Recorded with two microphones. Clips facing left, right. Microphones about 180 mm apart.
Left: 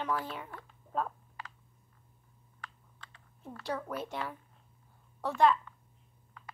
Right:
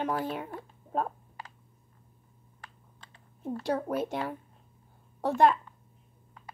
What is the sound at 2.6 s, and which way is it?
Typing, 35° right (ahead or behind).